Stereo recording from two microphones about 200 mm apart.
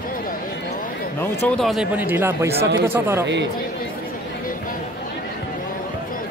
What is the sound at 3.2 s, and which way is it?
Speech, 60° right (ahead or behind).